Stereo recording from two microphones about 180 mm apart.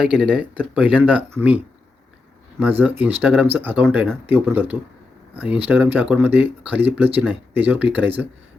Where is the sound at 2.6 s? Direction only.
10° right (ahead or behind).